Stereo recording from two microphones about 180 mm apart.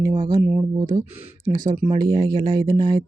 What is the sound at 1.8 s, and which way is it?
Speech, 25° right (ahead or behind).